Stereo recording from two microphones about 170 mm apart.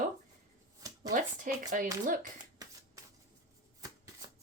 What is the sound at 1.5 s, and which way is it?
Speech, 50° right (ahead or behind).